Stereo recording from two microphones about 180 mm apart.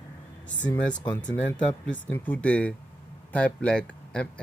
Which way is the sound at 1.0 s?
20° left (ahead or behind).